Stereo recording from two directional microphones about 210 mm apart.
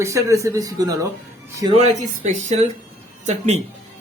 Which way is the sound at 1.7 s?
30° right (ahead or behind).